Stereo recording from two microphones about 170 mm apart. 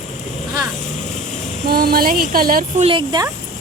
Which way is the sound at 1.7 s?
60° right (ahead or behind).